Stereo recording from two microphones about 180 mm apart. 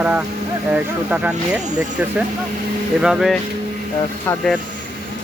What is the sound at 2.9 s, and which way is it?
Speech, 5° right (ahead or behind).